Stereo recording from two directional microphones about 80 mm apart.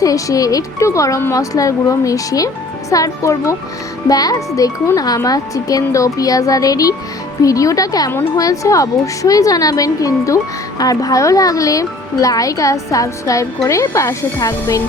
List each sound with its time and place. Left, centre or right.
0.0 s a woman's voice: left